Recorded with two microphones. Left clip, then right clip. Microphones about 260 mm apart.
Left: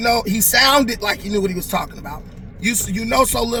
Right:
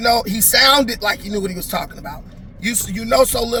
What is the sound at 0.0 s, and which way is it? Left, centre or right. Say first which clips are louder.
Speech: right 1 dB; centre.